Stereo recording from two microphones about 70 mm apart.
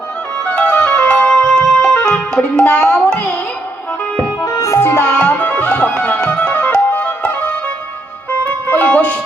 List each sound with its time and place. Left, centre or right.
0.7 s music: centre
4.4 s music: left
5.0 s music: centre